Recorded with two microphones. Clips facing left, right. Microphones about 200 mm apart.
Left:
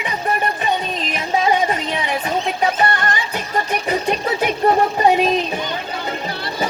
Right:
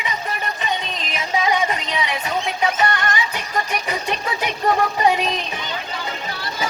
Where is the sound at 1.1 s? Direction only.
35° left (ahead or behind).